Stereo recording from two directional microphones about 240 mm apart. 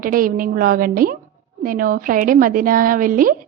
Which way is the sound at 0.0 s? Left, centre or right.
Right.